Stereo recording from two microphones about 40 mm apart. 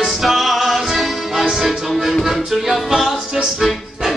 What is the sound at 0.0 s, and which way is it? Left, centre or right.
Music, centre.